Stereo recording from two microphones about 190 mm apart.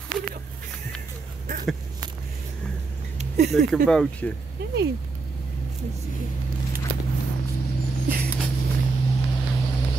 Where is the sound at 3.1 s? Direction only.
35° right (ahead or behind).